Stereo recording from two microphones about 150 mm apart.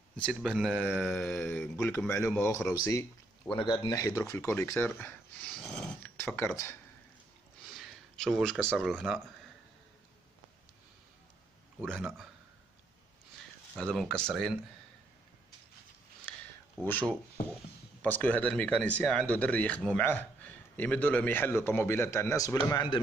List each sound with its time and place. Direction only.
0.2 s speech: centre (ahead or behind)
0.8 s a man's voice: 5° left (ahead or behind)
3.4 s a man's voice: 30° left (ahead or behind); by 6.1 s 5° left (ahead or behind)
6.1 s speech: 15° left (ahead or behind)
7.7 s speech: centre (ahead or behind)
11.8 s speech: 5° right (ahead or behind)
13.9 s speech: 5° left (ahead or behind)
16.8 s a man's voice: 10° left (ahead or behind)